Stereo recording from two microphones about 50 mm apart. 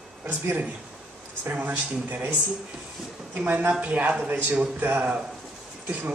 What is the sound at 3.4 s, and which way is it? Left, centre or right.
Speech, right.